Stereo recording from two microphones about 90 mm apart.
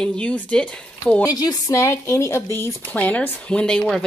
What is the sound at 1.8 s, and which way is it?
Speech, 30° left (ahead or behind).